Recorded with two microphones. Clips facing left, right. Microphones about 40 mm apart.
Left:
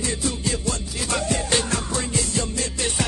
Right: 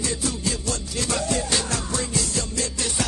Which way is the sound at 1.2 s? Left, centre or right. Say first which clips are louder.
Left 2 dB; left.